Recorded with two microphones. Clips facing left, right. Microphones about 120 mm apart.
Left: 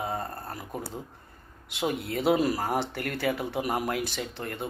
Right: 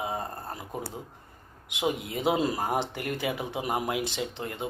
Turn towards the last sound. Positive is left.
turn(degrees=-20)  # may be behind; listen again after turning